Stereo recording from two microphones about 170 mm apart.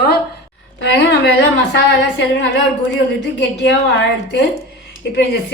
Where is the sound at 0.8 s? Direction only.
90° left.